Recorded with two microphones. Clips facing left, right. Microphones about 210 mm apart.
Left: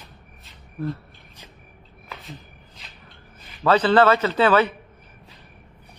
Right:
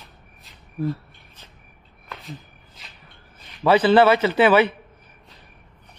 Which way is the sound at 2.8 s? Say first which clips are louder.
Right 1 dB; centre (ahead or behind).